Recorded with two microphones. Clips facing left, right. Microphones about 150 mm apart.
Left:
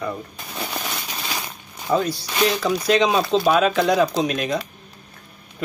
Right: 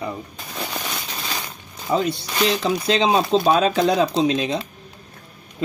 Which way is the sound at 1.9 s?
20° right (ahead or behind).